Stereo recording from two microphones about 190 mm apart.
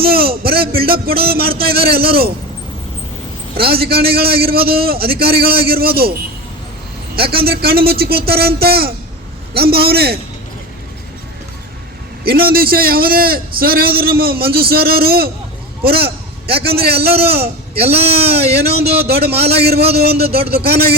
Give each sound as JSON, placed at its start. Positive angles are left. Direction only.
{"t": 0.0, "sound": "a sound", "side_deg": -55}
{"t": 1.6, "sound": "a man's voice", "side_deg": -55}
{"t": 3.6, "sound": "a man's voice", "side_deg": -55}
{"t": 7.2, "sound": "a man's voice", "side_deg": -55}
{"t": 12.2, "sound": "a man's voice", "side_deg": -55}
{"t": 17.7, "sound": "speech", "side_deg": -30}
{"t": 18.5, "sound": "a man's voice", "side_deg": -55}